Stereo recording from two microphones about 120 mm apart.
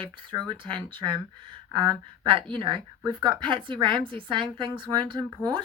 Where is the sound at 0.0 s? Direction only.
40° right (ahead or behind).